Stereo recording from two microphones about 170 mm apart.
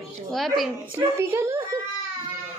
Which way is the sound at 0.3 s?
Centre (ahead or behind).